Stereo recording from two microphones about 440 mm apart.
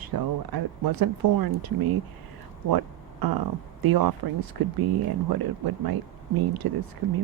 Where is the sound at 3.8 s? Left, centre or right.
Right.